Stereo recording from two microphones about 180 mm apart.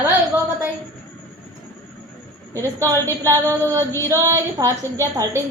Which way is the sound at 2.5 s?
15° right (ahead or behind).